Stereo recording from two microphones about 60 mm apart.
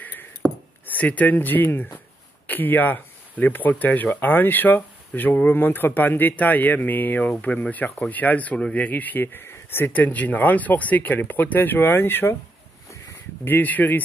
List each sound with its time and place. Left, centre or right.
0.0 s a sound: left
0.8 s speech: left
13.5 s speech: left